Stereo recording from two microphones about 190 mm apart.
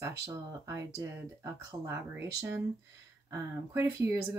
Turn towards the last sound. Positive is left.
turn(degrees=-15)  # may be behind; listen again after turning